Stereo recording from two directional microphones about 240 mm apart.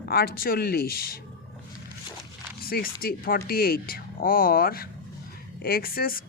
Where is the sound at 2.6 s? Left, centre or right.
Left.